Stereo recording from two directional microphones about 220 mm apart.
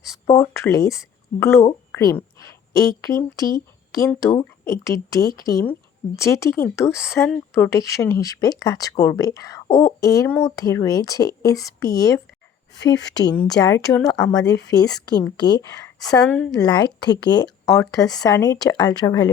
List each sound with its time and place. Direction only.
0.3 s a woman's voice: 15° left (ahead or behind)
3.9 s speech: 15° left (ahead or behind)
12.7 s speech: 55° left (ahead or behind)
13.0 s speech: 15° left (ahead or behind)
14.3 s speech: 15° left (ahead or behind)
16.6 s speech: 20° left (ahead or behind)